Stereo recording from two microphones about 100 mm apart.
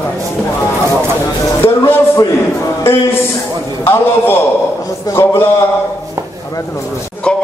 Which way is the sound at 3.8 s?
25° left (ahead or behind).